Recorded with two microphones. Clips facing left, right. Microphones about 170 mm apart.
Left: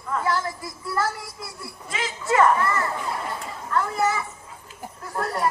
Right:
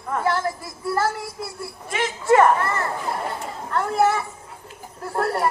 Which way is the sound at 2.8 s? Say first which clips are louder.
Right 1 dB; 50° right (ahead or behind).